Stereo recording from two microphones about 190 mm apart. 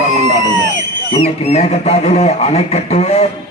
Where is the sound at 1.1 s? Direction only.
30° left (ahead or behind).